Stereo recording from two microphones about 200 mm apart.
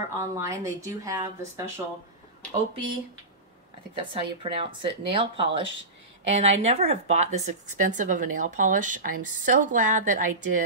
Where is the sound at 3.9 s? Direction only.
25° right (ahead or behind).